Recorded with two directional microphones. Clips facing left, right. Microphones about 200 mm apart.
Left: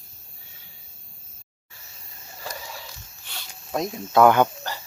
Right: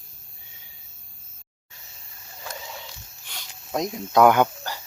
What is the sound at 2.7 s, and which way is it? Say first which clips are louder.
Snake: even; 15° right (ahead or behind).